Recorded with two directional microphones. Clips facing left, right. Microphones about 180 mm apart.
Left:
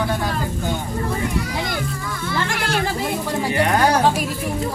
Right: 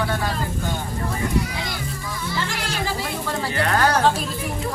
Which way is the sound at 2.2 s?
55° left (ahead or behind).